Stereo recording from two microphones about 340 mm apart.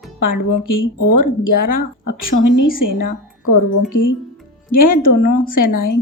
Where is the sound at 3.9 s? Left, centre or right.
Left.